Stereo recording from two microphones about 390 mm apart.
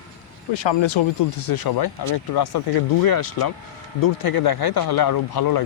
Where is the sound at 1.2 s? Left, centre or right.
Left.